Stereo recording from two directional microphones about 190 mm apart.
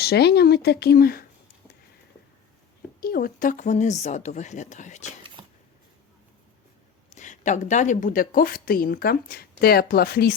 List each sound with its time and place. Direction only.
0.0 s speech: 60° left (ahead or behind)
3.0 s speech: 50° left (ahead or behind)
5.4 s a sound: 25° right (ahead or behind)
7.2 s a woman's voice: 40° left (ahead or behind)